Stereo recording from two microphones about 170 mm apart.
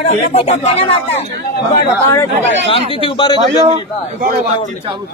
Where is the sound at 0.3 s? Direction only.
40° left (ahead or behind).